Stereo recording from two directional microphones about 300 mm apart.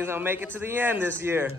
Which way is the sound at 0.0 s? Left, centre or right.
Centre.